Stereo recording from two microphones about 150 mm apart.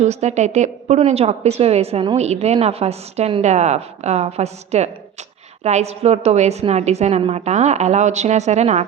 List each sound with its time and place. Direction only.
0.0 s a woman's voice: 50° right (ahead or behind)